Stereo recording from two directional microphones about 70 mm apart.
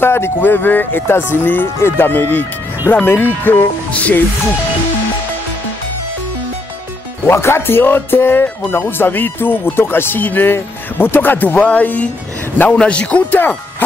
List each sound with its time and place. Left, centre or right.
0.0 s speech: left
7.2 s speech: left